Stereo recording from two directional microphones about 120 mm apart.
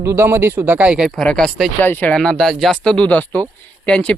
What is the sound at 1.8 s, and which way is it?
Speech, 15° left (ahead or behind).